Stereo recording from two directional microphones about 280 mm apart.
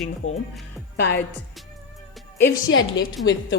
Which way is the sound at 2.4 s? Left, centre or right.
Left.